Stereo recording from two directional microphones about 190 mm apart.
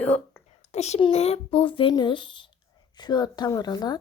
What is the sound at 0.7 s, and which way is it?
Speech, 35° left (ahead or behind).